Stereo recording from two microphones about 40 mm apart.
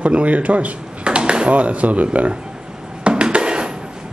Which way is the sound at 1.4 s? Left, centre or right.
Right.